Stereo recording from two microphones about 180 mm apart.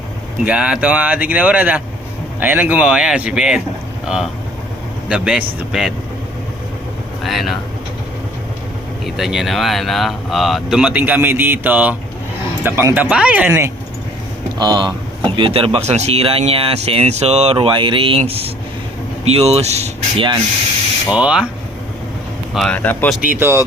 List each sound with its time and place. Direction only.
0.4 s speech: 5° right (ahead or behind)
7.2 s speech: centre (ahead or behind)
9.0 s speech: centre (ahead or behind)
14.6 s speech: 25° right (ahead or behind)
21.1 s speech: 5° right (ahead or behind)
22.5 s speech: 5° left (ahead or behind)
23.4 s speech: 15° right (ahead or behind)